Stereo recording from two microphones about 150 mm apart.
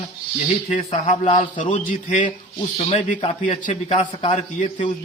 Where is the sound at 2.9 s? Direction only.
45° left (ahead or behind).